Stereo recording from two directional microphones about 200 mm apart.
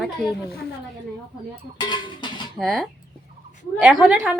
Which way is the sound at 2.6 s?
Centre (ahead or behind).